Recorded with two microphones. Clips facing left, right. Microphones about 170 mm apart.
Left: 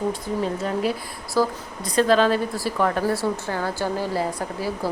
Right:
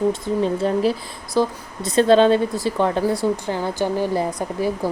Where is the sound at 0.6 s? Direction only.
30° right (ahead or behind).